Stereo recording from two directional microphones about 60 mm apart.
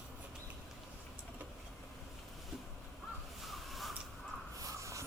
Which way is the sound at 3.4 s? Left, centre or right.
Centre.